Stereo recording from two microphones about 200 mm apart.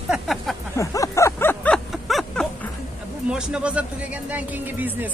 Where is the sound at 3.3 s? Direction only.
5° right (ahead or behind).